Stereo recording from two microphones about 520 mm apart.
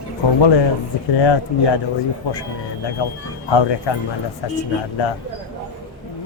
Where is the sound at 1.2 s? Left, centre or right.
Left.